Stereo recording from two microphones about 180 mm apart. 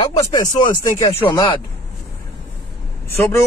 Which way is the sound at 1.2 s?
25° left (ahead or behind).